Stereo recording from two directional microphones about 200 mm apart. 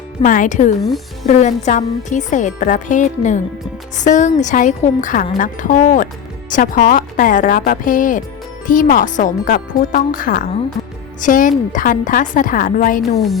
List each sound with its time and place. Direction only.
0.2 s speech: 40° left (ahead or behind)
0.9 s speech: centre (ahead or behind)
1.3 s speech: 35° left (ahead or behind)